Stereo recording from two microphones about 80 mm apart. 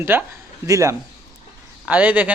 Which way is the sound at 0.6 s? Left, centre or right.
Right.